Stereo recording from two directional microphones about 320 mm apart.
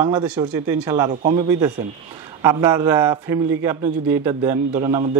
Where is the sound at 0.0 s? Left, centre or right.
Centre.